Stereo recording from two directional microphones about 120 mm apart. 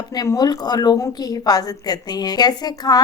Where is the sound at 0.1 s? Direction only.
35° left (ahead or behind).